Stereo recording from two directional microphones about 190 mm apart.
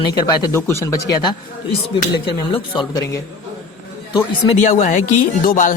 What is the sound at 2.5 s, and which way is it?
Speech, 20° left (ahead or behind).